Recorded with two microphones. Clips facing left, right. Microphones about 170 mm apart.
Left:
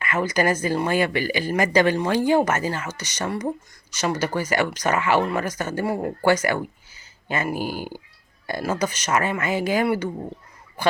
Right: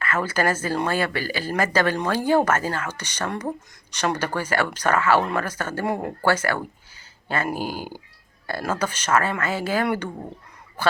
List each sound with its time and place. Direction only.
0.0 s speech: 15° left (ahead or behind)
7.6 s speech: 45° right (ahead or behind)
8.4 s speech: 10° left (ahead or behind)